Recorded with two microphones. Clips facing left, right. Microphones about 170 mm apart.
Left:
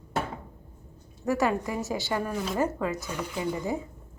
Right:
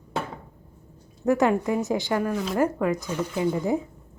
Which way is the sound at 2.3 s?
5° left (ahead or behind).